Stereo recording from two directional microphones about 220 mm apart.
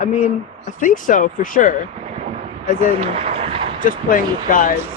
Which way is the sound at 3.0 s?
25° right (ahead or behind).